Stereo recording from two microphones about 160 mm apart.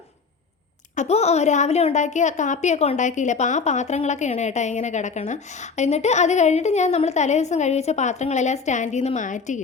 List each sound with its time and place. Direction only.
0.9 s a woman's voice: 40° left (ahead or behind)